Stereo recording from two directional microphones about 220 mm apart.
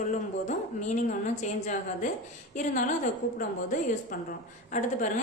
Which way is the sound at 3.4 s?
40° left (ahead or behind).